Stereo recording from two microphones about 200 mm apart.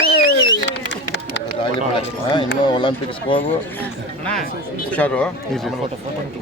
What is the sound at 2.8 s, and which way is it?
Speech, 25° left (ahead or behind).